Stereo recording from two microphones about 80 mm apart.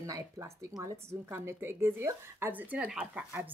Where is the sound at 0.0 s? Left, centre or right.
Right; by 3.3 s centre.